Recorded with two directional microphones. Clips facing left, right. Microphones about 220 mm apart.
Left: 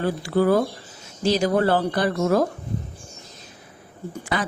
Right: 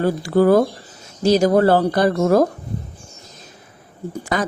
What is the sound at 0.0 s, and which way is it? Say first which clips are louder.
A woman's voice: right 5 dB; 45° right (ahead or behind).